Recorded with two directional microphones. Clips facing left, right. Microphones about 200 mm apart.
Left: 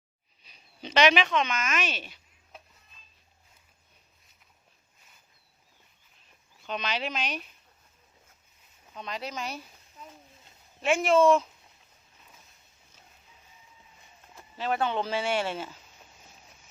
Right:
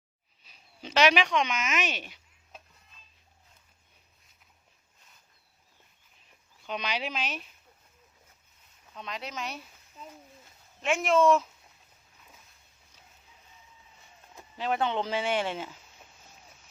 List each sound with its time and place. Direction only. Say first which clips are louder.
0.4 s speech: left 2 dB; 5° right (ahead or behind)
6.7 s speech: left 1 dB; 10° right (ahead or behind)
9.0 s speech: left 2 dB; centre (ahead or behind)
10.8 s speech: left 2 dB; centre (ahead or behind)
14.3 s speech: even; 15° right (ahead or behind)